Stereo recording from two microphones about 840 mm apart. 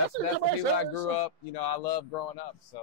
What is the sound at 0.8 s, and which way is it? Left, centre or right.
Speech, left.